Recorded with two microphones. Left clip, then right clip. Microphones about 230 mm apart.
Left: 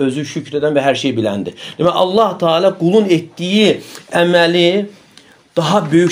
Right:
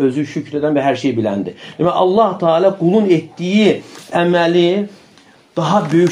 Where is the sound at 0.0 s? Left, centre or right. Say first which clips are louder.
Right 1 dB; left.